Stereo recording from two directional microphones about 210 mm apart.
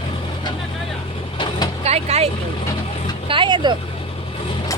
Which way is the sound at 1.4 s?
20° left (ahead or behind).